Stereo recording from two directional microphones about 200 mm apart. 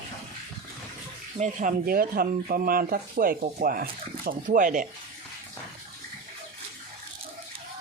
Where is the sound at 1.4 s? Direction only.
35° right (ahead or behind).